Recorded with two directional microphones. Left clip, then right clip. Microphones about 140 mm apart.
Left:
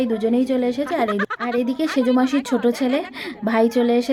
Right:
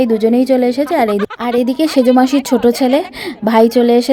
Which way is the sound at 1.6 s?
40° right (ahead or behind).